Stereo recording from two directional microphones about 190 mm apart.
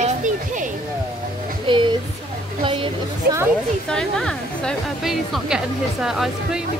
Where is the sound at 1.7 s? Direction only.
25° right (ahead or behind).